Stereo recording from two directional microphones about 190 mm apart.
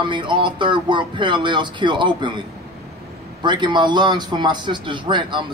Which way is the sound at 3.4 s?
25° right (ahead or behind).